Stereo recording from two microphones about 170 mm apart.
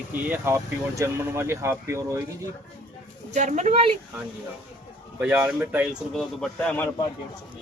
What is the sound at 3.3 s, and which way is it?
Speech, 45° right (ahead or behind).